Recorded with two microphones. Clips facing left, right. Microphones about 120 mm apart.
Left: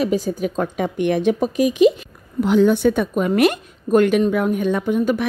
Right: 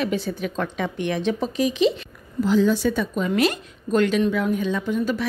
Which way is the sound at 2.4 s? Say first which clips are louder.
Left 4 dB; 60° left (ahead or behind).